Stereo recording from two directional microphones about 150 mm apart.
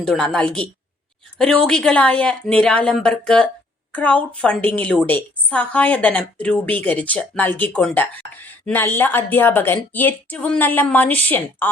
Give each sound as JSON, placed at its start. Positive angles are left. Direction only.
{"t": 0.0, "sound": "a woman's voice", "side_deg": 5}